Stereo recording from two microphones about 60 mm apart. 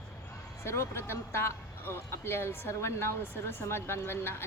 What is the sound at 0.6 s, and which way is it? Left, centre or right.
Speech, left.